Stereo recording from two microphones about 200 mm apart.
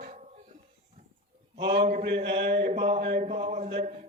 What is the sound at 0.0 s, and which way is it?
Dog, 40° right (ahead or behind).